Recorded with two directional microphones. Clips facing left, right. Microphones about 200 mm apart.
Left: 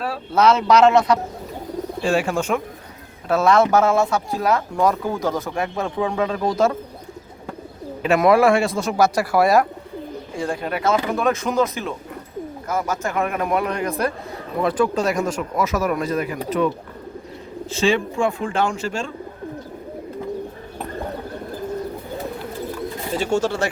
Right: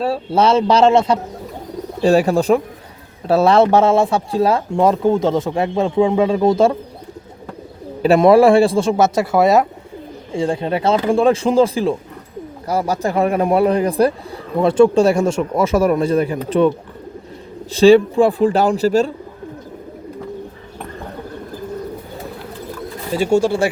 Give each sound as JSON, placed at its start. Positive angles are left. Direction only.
{"t": 0.0, "sound": "speech", "side_deg": -30}
{"t": 2.0, "sound": "speech", "side_deg": -40}
{"t": 8.0, "sound": "speech", "side_deg": -30}
{"t": 23.1, "sound": "speech", "side_deg": -10}